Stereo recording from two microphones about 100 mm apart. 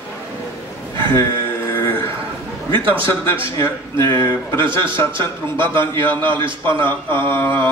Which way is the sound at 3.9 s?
25° left (ahead or behind).